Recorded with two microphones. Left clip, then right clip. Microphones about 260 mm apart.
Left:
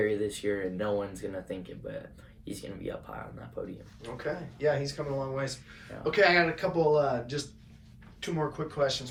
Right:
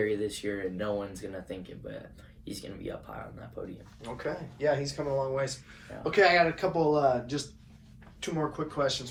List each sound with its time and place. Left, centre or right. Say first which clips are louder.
0.0 s speech: left 1 dB; centre
4.0 s speech: even; right; by 9.0 s centre